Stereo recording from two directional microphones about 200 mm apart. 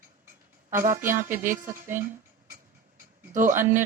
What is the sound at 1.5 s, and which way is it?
Speech, 10° right (ahead or behind).